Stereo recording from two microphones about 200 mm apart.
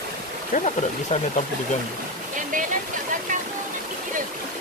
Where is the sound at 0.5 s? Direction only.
45° left (ahead or behind).